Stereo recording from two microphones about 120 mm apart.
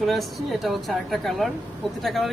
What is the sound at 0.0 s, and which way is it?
Speech, centre (ahead or behind).